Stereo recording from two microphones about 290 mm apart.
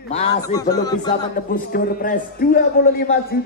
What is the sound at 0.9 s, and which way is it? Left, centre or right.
A man's voice, left.